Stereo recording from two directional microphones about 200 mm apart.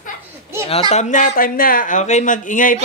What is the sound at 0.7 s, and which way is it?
Speech, 30° left (ahead or behind).